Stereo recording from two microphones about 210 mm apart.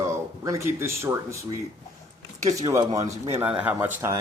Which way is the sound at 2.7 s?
15° right (ahead or behind).